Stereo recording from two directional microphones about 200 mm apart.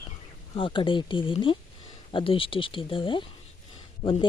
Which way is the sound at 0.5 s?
25° left (ahead or behind).